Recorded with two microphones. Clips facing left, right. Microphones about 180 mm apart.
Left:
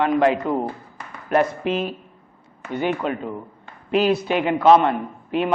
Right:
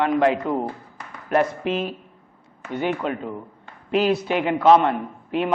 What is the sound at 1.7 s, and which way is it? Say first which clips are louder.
A man's voice: left 1 dB; 10° left (ahead or behind).